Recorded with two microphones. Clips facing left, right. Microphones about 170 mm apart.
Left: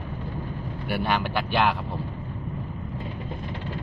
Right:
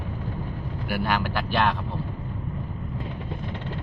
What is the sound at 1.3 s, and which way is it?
Speech, 5° left (ahead or behind).